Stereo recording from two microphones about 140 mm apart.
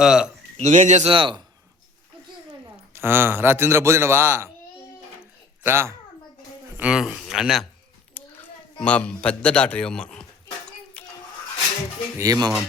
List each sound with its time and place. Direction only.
0.0 s speech: 5° right (ahead or behind)
0.5 s a man's voice: 55° right (ahead or behind)
1.1 s speech: 40° right (ahead or behind)
2.9 s a man's voice: 15° right (ahead or behind)
5.6 s speech: 20° right (ahead or behind)
6.7 s speech: 5° right (ahead or behind)
8.1 s speech: 10° left (ahead or behind)
11.0 s a sound: 10° left (ahead or behind)
12.1 s speech: 25° right (ahead or behind)